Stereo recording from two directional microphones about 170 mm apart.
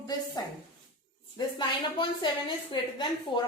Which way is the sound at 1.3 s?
25° left (ahead or behind).